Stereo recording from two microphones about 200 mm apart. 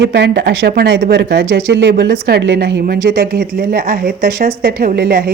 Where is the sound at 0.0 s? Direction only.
55° right (ahead or behind).